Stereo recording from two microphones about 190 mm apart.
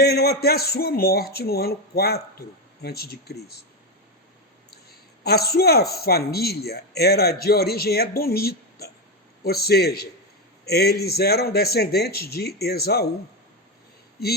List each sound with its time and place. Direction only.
0.0 s speech: 55° left (ahead or behind)
4.7 s speech: 55° left (ahead or behind)